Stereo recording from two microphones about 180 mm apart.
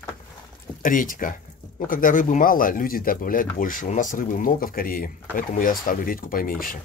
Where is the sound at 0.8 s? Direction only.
50° left (ahead or behind).